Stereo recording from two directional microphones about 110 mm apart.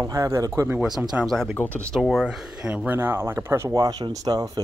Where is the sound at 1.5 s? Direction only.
15° left (ahead or behind).